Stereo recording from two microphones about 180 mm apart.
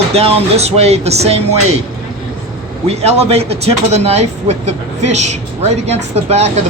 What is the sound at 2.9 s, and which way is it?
Speech, 35° right (ahead or behind).